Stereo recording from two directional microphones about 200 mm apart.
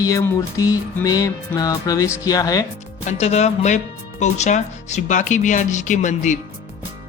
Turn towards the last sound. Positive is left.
turn(degrees=35)  # may be behind; listen again after turning